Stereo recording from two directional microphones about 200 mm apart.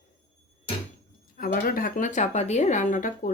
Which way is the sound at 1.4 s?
45° left (ahead or behind).